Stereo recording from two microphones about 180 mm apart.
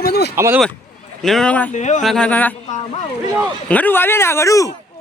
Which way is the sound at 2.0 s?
5° left (ahead or behind).